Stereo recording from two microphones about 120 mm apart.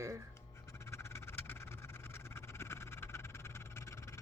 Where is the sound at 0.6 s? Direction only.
20° left (ahead or behind).